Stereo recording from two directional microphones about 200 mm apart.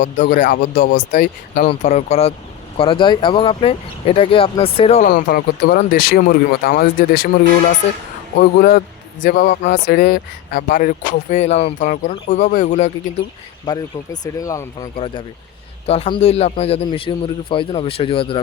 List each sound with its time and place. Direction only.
0.0 s speech: 40° left (ahead or behind)
1.6 s a man's voice: 35° left (ahead or behind)
5.0 s speech: 50° left (ahead or behind)
8.4 s speech: 50° left (ahead or behind)
13.7 s speech: 20° left (ahead or behind)
14.9 s a man's voice: 25° left (ahead or behind)